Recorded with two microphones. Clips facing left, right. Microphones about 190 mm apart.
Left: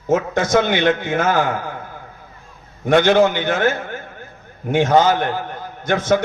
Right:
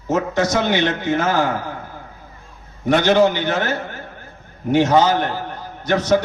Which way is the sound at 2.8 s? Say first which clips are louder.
Left 1 dB; 50° left (ahead or behind).